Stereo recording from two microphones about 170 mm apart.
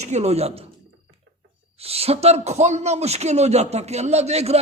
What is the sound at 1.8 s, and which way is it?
A man's voice, 35° right (ahead or behind).